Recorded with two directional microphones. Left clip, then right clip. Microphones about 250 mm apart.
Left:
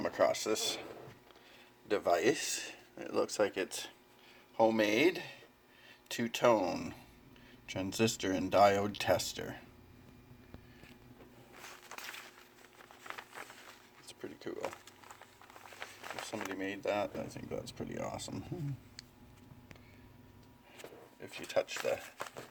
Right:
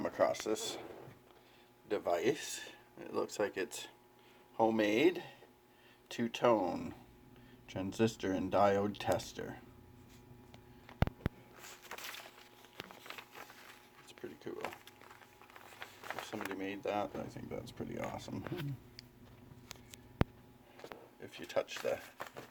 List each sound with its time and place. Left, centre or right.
0.0 s speech: centre
1.9 s speech: centre
14.5 s a sound: centre
16.2 s speech: centre
21.2 s speech: centre